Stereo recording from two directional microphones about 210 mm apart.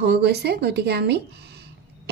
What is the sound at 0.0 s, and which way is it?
A woman's voice, 50° right (ahead or behind).